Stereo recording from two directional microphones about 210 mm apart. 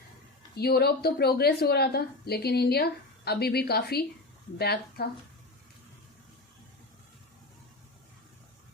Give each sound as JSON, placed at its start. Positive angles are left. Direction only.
{"t": 0.5, "sound": "a woman's voice", "side_deg": 50}